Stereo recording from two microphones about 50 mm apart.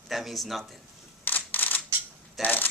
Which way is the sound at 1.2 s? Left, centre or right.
Left.